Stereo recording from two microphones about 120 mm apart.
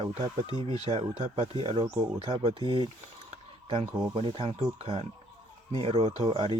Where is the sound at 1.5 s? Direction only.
45° right (ahead or behind).